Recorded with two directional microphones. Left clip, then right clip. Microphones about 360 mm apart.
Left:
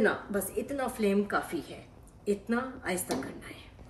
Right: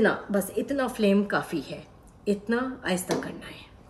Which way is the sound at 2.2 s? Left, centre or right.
Right.